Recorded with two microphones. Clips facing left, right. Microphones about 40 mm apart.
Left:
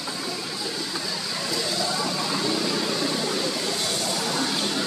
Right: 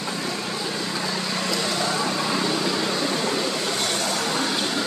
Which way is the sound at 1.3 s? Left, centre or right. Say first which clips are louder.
Right 1 dB; right.